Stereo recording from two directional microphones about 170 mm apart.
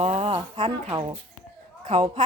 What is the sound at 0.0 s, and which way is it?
Speech, 35° right (ahead or behind).